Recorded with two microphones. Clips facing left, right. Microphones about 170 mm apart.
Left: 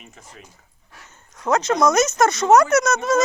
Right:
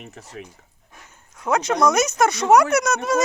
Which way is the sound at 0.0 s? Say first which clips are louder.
Right 7 dB; 70° right (ahead or behind).